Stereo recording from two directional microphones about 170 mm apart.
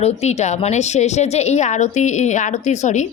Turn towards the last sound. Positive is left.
turn(degrees=45)  # may be behind; listen again after turning